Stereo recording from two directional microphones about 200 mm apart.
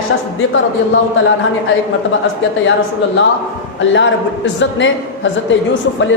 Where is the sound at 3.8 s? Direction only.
65° left (ahead or behind).